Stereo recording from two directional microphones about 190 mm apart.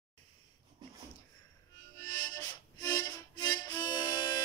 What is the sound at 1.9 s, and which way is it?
Harmonica, 20° left (ahead or behind).